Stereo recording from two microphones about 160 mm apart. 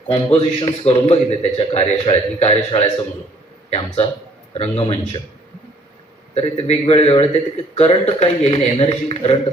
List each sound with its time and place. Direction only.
0.1 s a man's voice: 40° left (ahead or behind)
6.3 s a man's voice: 40° left (ahead or behind)